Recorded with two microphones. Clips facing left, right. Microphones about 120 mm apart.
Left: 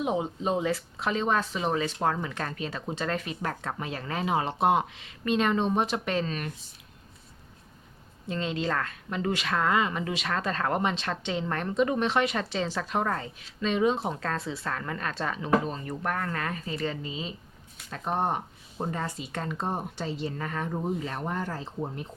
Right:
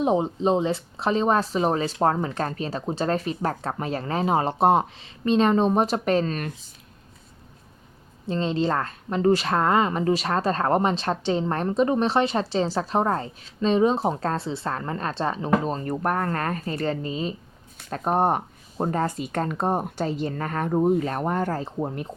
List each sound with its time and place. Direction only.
0.0 s a woman's voice: 35° right (ahead or behind)
8.3 s a woman's voice: 35° right (ahead or behind); by 22.0 s 60° right (ahead or behind)